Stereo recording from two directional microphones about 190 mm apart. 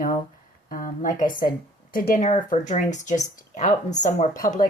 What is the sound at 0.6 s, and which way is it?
Speech, 45° left (ahead or behind).